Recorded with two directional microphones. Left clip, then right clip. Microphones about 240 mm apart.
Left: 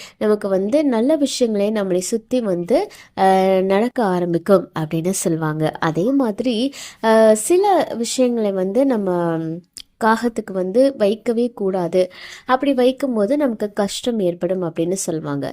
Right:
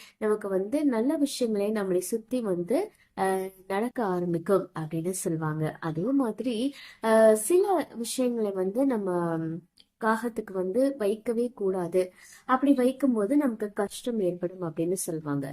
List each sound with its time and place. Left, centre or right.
0.2 s speech: left